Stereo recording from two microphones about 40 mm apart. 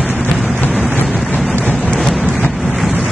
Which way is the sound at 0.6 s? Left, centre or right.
Left.